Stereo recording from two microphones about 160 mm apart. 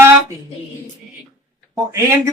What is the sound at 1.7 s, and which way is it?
Speech, 15° right (ahead or behind).